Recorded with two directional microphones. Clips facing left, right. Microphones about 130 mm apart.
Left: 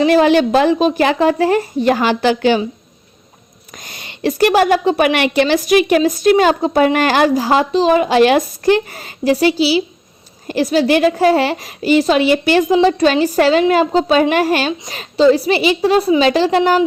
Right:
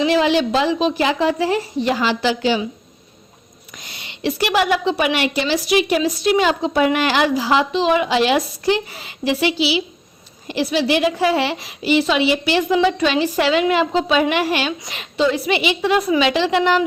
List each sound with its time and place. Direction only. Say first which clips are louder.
0.0 s a woman's voice: left 5 dB; 50° left (ahead or behind)
3.8 s a woman's voice: left 4 dB; 45° left (ahead or behind)